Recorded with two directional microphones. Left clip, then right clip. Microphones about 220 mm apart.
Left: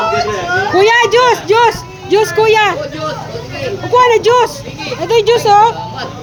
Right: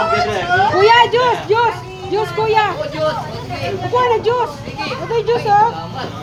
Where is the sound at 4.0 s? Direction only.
35° left (ahead or behind).